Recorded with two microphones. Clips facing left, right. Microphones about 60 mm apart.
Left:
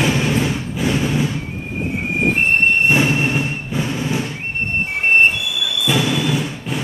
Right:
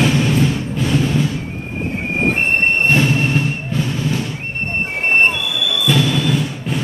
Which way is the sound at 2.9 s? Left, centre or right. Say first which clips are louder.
Right 1 dB; centre.